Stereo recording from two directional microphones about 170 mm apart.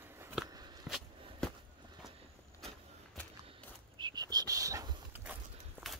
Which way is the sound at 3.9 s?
25° right (ahead or behind).